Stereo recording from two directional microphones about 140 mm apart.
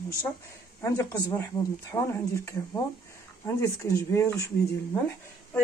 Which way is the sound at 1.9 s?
20° left (ahead or behind).